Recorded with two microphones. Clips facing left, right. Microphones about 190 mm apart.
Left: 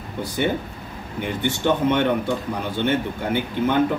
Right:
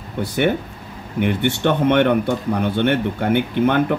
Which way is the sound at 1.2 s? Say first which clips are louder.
Right 4 dB; 65° right (ahead or behind).